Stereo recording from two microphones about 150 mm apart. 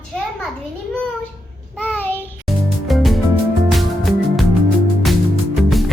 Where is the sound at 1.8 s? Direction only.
10° left (ahead or behind).